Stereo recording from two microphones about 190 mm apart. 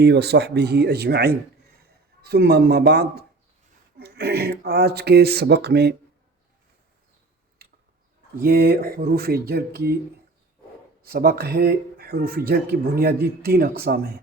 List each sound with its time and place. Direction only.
0.0 s speech: 60° right (ahead or behind)
8.4 s speech: 55° right (ahead or behind)
11.0 s speech: 50° right (ahead or behind)